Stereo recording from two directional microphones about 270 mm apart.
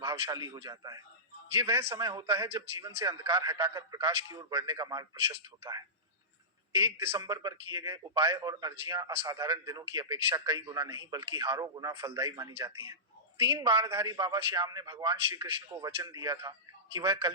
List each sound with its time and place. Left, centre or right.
0.0 s a man's voice: centre